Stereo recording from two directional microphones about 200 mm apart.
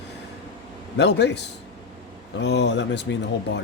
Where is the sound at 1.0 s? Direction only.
60° left (ahead or behind).